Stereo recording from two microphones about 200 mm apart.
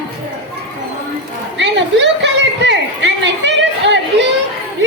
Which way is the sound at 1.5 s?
60° right (ahead or behind).